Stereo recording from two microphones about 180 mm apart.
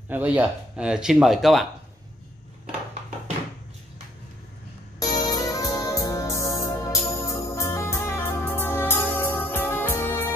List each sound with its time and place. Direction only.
0.1 s speech: 10° right (ahead or behind)
4.9 s music: 20° left (ahead or behind)